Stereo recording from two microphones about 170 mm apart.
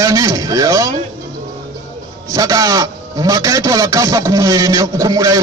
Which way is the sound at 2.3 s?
20° right (ahead or behind).